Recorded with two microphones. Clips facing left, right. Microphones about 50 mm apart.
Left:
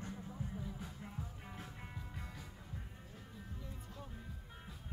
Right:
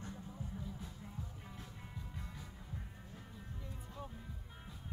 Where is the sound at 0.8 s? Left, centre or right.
Left.